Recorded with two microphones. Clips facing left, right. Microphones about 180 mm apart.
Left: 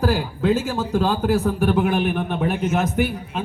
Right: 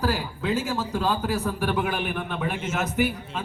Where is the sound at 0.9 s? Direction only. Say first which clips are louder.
Left 6 dB; 45° left (ahead or behind).